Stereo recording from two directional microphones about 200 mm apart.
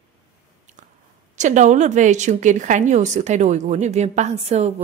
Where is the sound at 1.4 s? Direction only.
35° right (ahead or behind).